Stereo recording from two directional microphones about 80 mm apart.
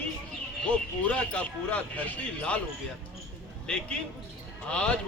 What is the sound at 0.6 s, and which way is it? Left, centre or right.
Speech, centre.